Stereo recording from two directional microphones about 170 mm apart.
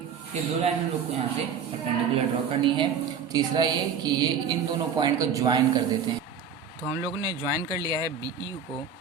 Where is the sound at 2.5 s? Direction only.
30° right (ahead or behind).